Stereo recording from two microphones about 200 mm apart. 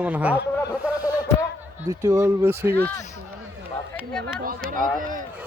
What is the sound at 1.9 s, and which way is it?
Speech, 15° right (ahead or behind).